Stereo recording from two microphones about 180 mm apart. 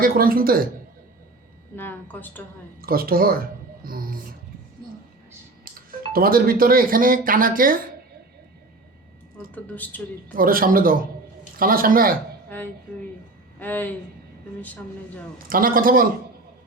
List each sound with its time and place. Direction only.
0.0 s speech: 55° right (ahead or behind)
1.7 s a woman's voice: 10° left (ahead or behind)
2.8 s speech: 55° right (ahead or behind)
5.7 s music: 55° right (ahead or behind)
6.1 s speech: 55° right (ahead or behind)
9.7 s a woman's voice: 10° left (ahead or behind)
10.3 s speech: 50° right (ahead or behind)
12.5 s a woman's voice: 10° left (ahead or behind)
15.4 s speech: 50° right (ahead or behind)